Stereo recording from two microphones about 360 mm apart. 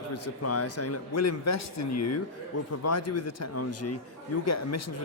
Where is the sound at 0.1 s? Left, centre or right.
Left.